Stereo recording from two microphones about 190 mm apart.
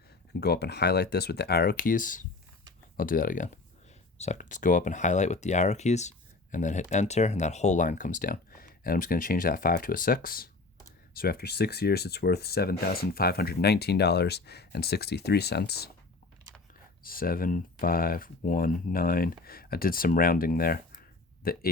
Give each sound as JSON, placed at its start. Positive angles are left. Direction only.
{"t": 0.3, "sound": "speech", "side_deg": 60}
{"t": 17.0, "sound": "speech", "side_deg": 50}